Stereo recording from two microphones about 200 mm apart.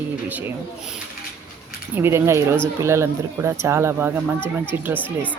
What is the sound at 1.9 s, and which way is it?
Speech, 10° right (ahead or behind).